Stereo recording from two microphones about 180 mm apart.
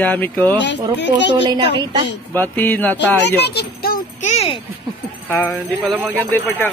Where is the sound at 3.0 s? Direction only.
70° left (ahead or behind).